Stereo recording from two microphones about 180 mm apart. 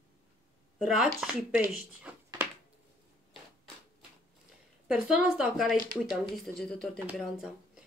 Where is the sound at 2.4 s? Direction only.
10° right (ahead or behind).